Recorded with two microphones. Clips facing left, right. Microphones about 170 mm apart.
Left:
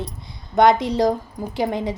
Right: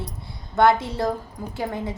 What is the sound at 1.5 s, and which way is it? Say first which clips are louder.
Speech: left 6 dB; 90° left.